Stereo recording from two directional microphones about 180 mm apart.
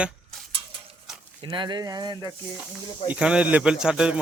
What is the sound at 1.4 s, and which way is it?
Speech, 25° right (ahead or behind).